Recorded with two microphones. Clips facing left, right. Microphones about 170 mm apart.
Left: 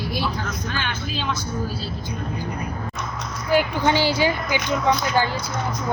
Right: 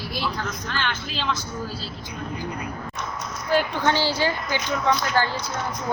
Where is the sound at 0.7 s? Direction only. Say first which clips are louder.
Left 1 dB; 10° left (ahead or behind).